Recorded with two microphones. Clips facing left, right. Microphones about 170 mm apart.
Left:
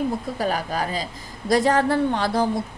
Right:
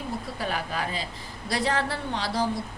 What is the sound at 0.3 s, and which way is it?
A woman's voice, 40° left (ahead or behind).